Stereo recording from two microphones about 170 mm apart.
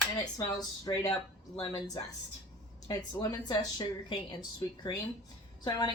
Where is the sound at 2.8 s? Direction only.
25° left (ahead or behind).